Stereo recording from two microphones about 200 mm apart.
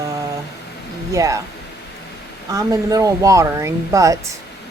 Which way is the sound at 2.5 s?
15° right (ahead or behind).